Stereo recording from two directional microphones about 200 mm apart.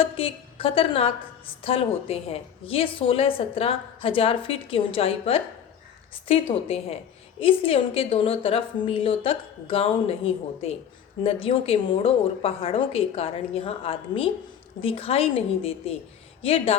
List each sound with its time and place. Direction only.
0.0 s a woman's voice: 30° left (ahead or behind)
11.2 s a woman's voice: 30° left (ahead or behind)